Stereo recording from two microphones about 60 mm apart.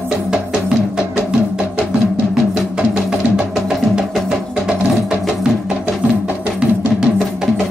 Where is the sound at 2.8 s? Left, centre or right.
Centre.